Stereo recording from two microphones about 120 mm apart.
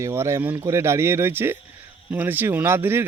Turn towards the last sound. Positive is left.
turn(degrees=-20)  # may be behind; listen again after turning